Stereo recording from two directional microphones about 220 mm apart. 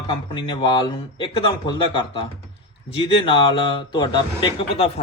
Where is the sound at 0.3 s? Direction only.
25° left (ahead or behind).